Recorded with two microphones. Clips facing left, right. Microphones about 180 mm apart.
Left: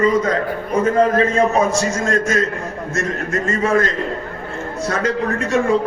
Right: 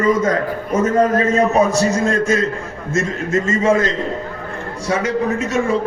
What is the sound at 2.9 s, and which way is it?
Speech, 25° right (ahead or behind).